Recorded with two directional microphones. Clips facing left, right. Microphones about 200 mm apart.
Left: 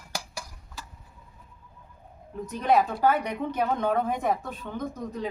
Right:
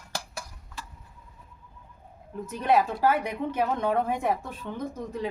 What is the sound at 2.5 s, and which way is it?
A woman's voice, 5° right (ahead or behind).